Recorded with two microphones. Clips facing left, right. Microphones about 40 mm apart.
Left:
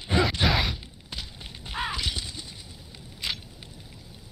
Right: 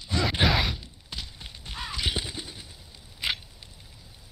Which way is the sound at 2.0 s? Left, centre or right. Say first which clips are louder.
Right 3 dB; right.